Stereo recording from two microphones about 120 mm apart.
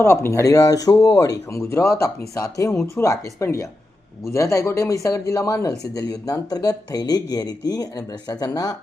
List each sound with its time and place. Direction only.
0.0 s speech: 20° left (ahead or behind)